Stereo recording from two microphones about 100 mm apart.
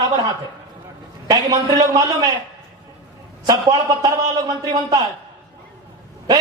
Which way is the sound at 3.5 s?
40° right (ahead or behind).